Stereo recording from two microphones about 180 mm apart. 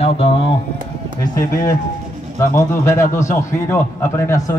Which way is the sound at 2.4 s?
50° left (ahead or behind).